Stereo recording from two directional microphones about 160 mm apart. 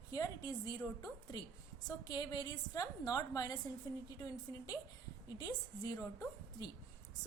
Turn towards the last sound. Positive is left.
turn(degrees=20)  # may be behind; listen again after turning